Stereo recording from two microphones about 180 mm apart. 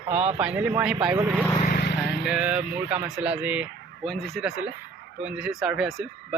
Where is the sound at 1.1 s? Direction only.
15° right (ahead or behind).